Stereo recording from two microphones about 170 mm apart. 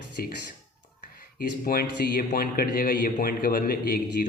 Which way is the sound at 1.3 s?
60° left (ahead or behind).